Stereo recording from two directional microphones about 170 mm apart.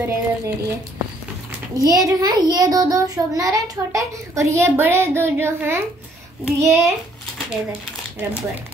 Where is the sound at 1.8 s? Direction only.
20° right (ahead or behind).